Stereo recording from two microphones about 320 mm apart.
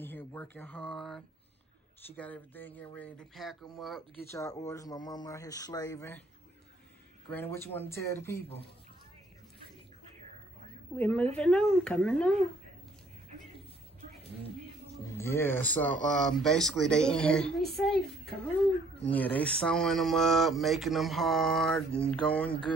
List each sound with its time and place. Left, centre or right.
0.0 s speech: centre
7.2 s speech: centre
11.0 s speech: centre
15.1 s speech: centre